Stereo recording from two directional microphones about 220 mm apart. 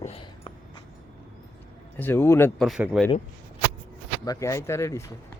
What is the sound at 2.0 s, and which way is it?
Speech, 10° left (ahead or behind).